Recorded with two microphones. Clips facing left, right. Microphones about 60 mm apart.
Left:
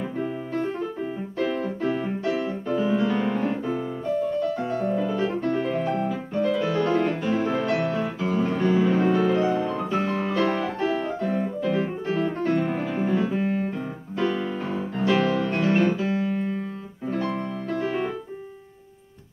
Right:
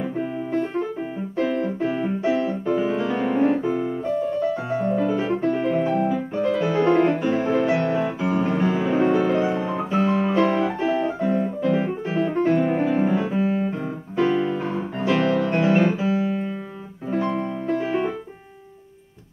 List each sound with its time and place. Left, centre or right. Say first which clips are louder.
1.6 s keyboard: right 2 dB; right
2.4 s piano: right 3 dB; centre
7.6 s music: right 3 dB; right
11.6 s piano: right 3 dB; centre
14.2 s music: right 5 dB; centre
14.5 s music: right 3 dB; centre
14.8 s music: left 1 dB; centre
15.5 s music: right 3 dB; centre
17.1 s piano: right 4 dB; centre